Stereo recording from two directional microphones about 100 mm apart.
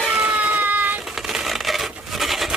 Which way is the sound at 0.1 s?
10° right (ahead or behind).